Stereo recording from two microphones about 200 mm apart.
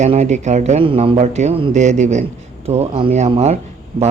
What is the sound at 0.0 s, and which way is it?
Speech, 35° right (ahead or behind).